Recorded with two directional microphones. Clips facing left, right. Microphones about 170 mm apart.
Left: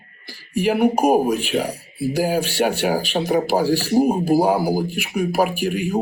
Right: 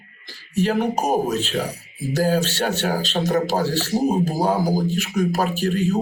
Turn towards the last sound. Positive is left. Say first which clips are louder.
# right 1 dB
turn(degrees=10)  # may be behind; listen again after turning